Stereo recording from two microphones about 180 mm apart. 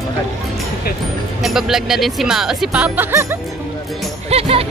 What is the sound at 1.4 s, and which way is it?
Speech, centre (ahead or behind).